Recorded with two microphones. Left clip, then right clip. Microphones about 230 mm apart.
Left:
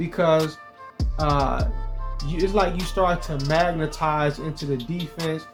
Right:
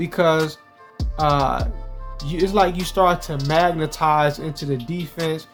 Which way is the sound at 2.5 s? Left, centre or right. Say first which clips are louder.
Right 5 dB; right.